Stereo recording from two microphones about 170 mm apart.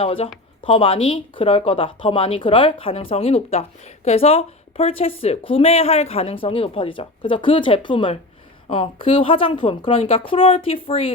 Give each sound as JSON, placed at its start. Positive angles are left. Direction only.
{"t": 0.0, "sound": "speech", "side_deg": 35}